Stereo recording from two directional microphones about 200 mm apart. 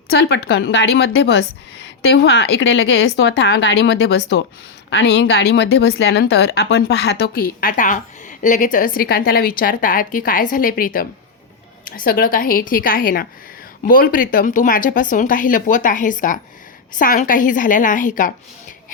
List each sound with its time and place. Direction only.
0.1 s speech: 60° left (ahead or behind); by 18.3 s 40° left (ahead or behind)